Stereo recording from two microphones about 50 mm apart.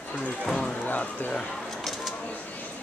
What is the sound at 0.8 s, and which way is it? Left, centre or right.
Speech, left.